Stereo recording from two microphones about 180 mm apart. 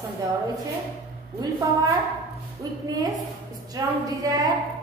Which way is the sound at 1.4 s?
20° right (ahead or behind).